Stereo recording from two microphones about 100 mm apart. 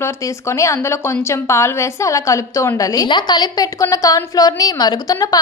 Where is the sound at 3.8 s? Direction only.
35° left (ahead or behind).